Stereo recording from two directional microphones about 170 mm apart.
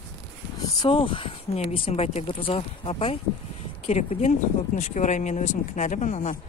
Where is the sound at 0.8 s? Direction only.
30° left (ahead or behind).